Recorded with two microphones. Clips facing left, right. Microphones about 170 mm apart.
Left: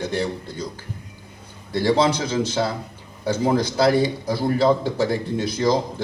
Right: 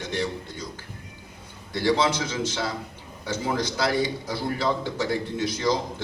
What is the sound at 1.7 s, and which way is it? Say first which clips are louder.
A man's voice: left 4 dB; 40° left (ahead or behind).